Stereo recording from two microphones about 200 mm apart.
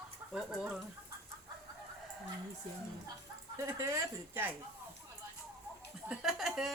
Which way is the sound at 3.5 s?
15° right (ahead or behind).